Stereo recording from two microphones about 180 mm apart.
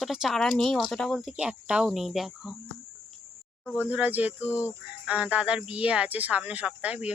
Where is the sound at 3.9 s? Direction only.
10° right (ahead or behind).